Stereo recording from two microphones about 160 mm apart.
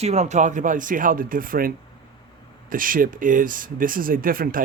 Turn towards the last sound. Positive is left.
turn(degrees=-65)  # may be behind; listen again after turning